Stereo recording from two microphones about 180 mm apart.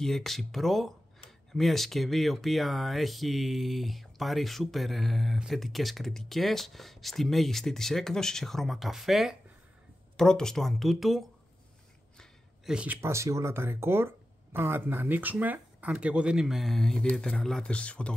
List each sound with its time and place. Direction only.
0.0 s speech: centre (ahead or behind)